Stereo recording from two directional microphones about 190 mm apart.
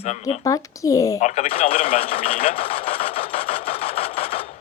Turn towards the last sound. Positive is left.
turn(degrees=30)  # may be behind; listen again after turning